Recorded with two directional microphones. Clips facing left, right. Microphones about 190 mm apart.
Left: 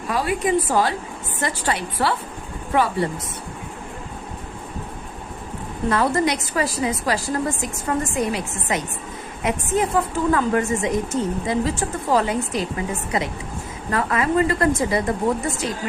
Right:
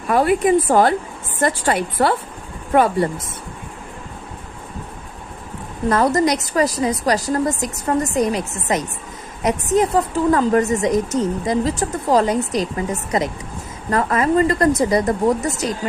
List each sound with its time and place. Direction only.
0.1 s a woman's voice: 55° right (ahead or behind)
5.9 s a woman's voice: 40° right (ahead or behind)